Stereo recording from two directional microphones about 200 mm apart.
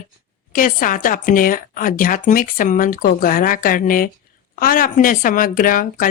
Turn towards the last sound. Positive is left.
turn(degrees=45)  # may be behind; listen again after turning